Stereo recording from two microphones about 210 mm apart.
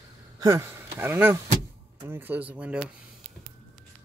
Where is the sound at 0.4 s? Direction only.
15° right (ahead or behind).